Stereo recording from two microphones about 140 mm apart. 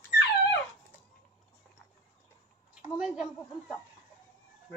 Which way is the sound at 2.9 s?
5° right (ahead or behind).